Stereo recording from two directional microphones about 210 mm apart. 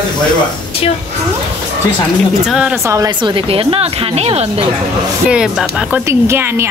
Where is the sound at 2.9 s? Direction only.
15° right (ahead or behind).